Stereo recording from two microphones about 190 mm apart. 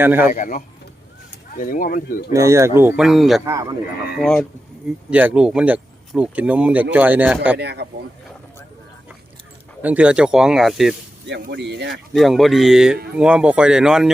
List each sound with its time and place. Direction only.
0.0 s speech: 10° right (ahead or behind)
0.3 s speech: 45° left (ahead or behind)
2.3 s speech: 15° right (ahead or behind)
3.4 s speech: 15° right (ahead or behind)
4.2 s speech: 5° left (ahead or behind)
7.6 s speech: 60° right (ahead or behind)
9.8 s speech: 5° right (ahead or behind)
11.3 s speech: 60° right (ahead or behind)
12.1 s speech: centre (ahead or behind)